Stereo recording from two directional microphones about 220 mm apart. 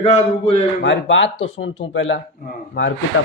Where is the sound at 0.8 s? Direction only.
55° left (ahead or behind).